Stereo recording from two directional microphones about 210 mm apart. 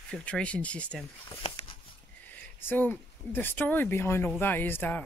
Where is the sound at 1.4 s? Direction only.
25° left (ahead or behind).